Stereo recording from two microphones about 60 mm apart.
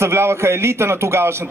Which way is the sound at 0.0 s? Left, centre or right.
Right.